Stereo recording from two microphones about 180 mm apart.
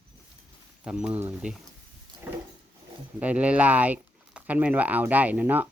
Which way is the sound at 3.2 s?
5° right (ahead or behind).